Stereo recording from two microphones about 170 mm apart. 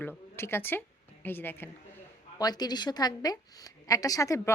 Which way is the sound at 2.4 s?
25° left (ahead or behind).